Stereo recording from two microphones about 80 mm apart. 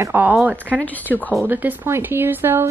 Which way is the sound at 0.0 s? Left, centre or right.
Right.